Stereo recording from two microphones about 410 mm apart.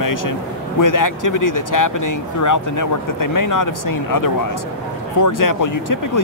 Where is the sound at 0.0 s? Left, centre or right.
Left.